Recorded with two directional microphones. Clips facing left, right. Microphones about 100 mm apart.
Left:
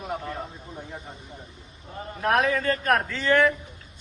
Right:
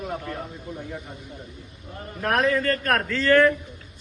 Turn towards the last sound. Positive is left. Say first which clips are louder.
# right 3 dB
turn(degrees=15)  # may be behind; listen again after turning